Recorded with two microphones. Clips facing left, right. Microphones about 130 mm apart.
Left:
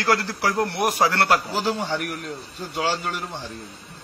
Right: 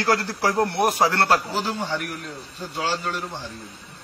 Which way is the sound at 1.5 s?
5° left (ahead or behind).